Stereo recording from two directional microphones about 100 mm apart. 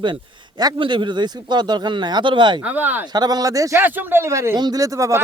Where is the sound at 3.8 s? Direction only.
20° right (ahead or behind).